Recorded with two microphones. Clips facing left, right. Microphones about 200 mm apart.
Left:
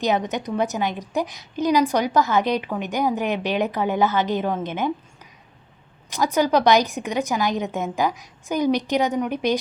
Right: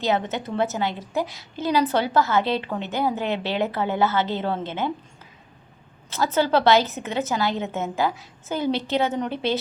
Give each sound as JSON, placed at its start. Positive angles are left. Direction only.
{"t": 0.0, "sound": "a woman's voice", "side_deg": 15}
{"t": 6.1, "sound": "a woman's voice", "side_deg": 15}